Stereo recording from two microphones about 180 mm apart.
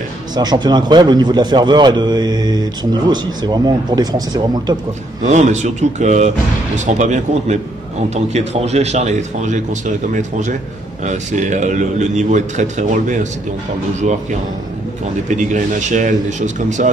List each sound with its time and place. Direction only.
0.4 s a man's voice: 25° right (ahead or behind)
5.2 s speech: 40° right (ahead or behind)
15.2 s speech: 40° right (ahead or behind)